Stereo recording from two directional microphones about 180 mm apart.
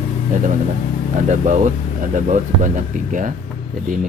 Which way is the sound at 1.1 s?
45° right (ahead or behind).